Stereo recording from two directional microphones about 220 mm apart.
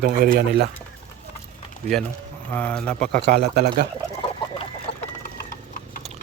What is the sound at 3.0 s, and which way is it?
Speech, 45° right (ahead or behind).